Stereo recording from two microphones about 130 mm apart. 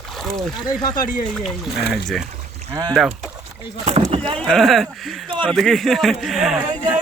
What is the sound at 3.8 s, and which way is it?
Speech, 50° right (ahead or behind).